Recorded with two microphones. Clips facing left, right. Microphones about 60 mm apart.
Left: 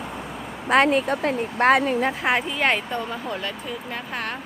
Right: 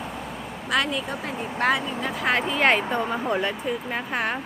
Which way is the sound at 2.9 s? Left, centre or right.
Centre.